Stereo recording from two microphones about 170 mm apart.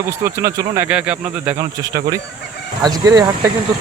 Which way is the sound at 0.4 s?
10° right (ahead or behind).